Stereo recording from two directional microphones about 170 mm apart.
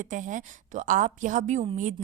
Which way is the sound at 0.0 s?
50° right (ahead or behind).